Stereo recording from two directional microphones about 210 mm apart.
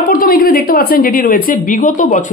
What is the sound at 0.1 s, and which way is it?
A woman's voice, 45° left (ahead or behind).